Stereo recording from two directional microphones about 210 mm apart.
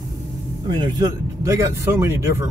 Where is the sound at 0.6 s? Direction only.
15° right (ahead or behind).